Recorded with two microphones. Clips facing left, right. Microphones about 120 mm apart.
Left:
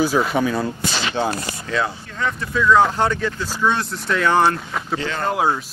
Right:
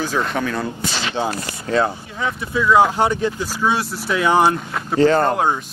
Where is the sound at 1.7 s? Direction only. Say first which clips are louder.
Right 5 dB; 40° right (ahead or behind).